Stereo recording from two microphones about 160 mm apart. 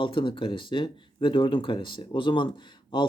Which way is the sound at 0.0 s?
30° left (ahead or behind).